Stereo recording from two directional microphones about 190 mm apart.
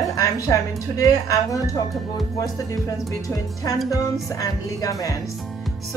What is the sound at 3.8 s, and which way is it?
Speech, 20° left (ahead or behind).